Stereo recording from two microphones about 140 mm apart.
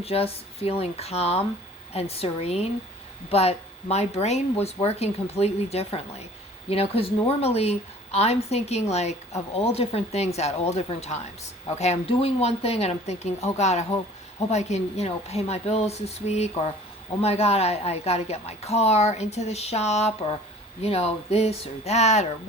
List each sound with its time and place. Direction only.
0.0 s a woman's voice: 45° left (ahead or behind)